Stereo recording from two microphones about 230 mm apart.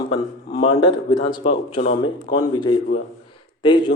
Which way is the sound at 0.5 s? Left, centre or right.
Centre.